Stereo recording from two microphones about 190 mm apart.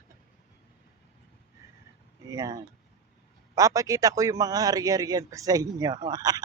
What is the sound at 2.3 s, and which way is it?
A man's voice, 20° right (ahead or behind).